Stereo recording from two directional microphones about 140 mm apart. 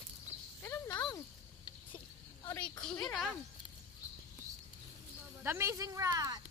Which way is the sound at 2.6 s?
5° left (ahead or behind).